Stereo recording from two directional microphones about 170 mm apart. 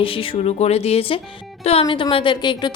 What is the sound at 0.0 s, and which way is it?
A woman's voice, 30° left (ahead or behind).